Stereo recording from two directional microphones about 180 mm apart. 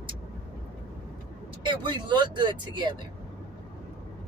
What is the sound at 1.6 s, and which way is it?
A woman's voice, 25° right (ahead or behind).